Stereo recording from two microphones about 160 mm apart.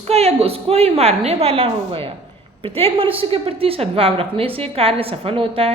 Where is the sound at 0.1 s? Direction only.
40° right (ahead or behind).